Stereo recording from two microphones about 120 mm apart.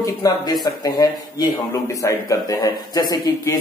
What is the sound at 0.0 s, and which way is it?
Speech, 30° left (ahead or behind).